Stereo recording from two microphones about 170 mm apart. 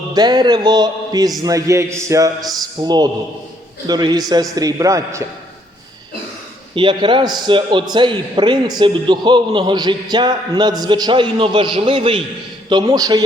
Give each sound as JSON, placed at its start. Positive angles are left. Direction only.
{"t": 0.1, "sound": "a man's voice", "side_deg": -25}
{"t": 6.7, "sound": "a man's voice", "side_deg": -30}